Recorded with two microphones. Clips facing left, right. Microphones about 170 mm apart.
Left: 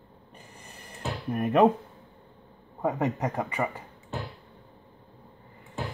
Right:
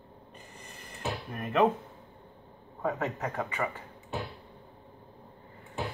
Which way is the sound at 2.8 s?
15° left (ahead or behind).